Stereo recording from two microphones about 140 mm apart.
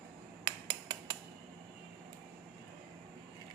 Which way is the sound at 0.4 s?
30° right (ahead or behind).